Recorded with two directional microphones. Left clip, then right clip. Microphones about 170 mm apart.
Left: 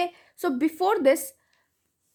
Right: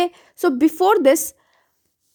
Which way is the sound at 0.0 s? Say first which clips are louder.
Right 8 dB; 40° right (ahead or behind).